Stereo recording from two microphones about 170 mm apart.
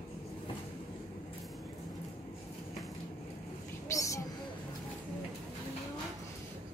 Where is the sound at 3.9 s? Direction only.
20° left (ahead or behind).